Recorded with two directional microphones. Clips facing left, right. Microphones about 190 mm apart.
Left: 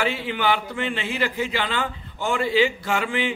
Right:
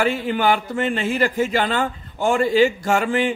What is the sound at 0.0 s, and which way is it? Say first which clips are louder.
A man's voice: right 5 dB; 45° right (ahead or behind).